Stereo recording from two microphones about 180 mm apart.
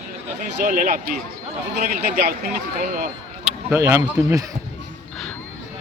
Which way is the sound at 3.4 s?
10° right (ahead or behind).